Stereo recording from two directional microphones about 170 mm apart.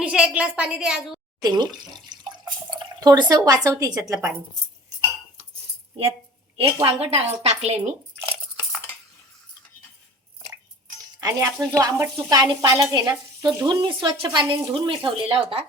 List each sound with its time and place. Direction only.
0.0 s a woman's voice: 5° right (ahead or behind)
1.4 s speech: 25° right (ahead or behind)
2.0 s drip: 25° right (ahead or behind)
6.8 s speech: 35° right (ahead or behind)
11.2 s speech: 20° right (ahead or behind); by 15.6 s 35° right (ahead or behind)